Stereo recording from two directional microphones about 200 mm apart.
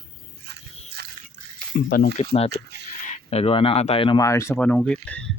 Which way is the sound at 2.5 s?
55° right (ahead or behind).